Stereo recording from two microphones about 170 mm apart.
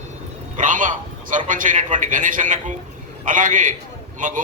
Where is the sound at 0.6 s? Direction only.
50° right (ahead or behind).